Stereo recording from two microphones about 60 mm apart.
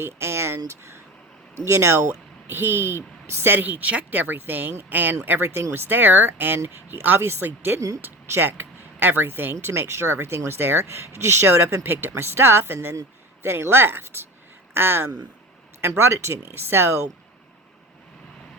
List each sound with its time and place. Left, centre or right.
0.0 s speech: right
2.5 s speech: right
16.1 s speech: right